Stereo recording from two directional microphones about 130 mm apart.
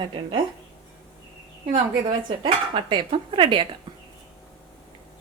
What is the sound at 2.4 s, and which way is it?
A woman's voice, 40° right (ahead or behind).